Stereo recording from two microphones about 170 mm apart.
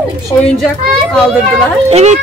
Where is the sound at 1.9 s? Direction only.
40° right (ahead or behind).